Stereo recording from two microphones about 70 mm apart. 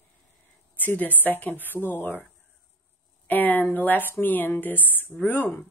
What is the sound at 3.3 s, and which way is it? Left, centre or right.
A woman's voice, left.